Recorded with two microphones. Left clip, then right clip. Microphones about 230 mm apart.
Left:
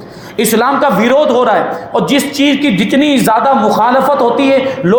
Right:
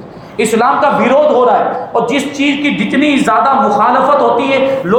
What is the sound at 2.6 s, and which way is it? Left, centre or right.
A man's voice, left.